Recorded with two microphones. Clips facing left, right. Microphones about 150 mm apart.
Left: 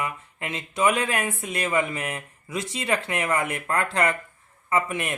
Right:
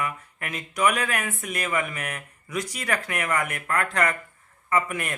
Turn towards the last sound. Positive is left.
turn(degrees=25)  # may be behind; listen again after turning